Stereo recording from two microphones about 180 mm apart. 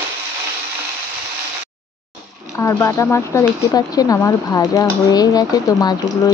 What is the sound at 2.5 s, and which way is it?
Speech, 15° left (ahead or behind).